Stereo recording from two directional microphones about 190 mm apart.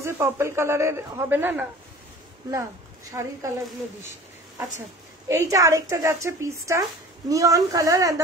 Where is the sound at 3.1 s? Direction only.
15° right (ahead or behind).